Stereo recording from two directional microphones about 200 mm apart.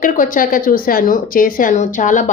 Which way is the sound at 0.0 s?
40° left (ahead or behind).